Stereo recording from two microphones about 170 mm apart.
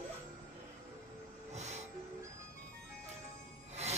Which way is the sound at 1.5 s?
40° right (ahead or behind).